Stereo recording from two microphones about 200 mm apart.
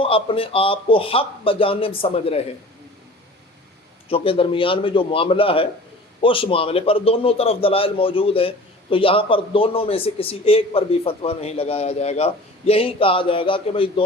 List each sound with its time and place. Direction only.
0.0 s a man's voice: 25° left (ahead or behind)
4.1 s a man's voice: 25° left (ahead or behind)